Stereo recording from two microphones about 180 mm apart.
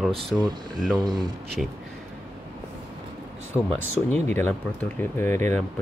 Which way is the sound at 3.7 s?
10° left (ahead or behind).